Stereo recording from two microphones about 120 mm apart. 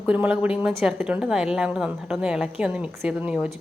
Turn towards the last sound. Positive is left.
turn(degrees=-10)  # may be behind; listen again after turning